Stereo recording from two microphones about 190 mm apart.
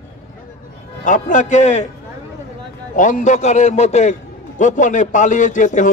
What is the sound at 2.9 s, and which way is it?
A man's voice, 40° left (ahead or behind).